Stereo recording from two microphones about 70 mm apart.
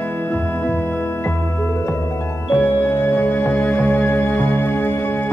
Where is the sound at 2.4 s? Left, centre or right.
Left.